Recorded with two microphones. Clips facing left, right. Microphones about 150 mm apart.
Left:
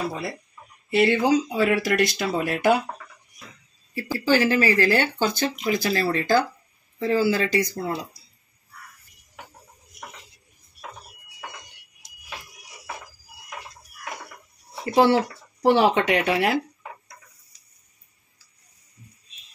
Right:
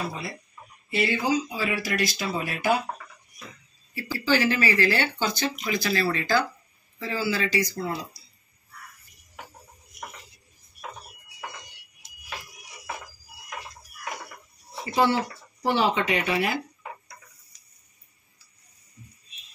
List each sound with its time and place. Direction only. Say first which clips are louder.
0.8 s speech: left 6 dB; 60° left (ahead or behind)
4.3 s speech: left 3 dB; 45° left (ahead or behind)
14.9 s speech: left 5 dB; 70° left (ahead or behind)